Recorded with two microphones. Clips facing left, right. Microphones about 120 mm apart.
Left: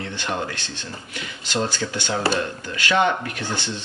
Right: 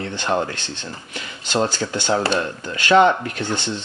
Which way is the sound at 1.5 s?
40° right (ahead or behind).